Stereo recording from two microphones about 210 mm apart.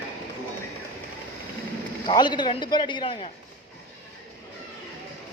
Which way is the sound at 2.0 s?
20° left (ahead or behind).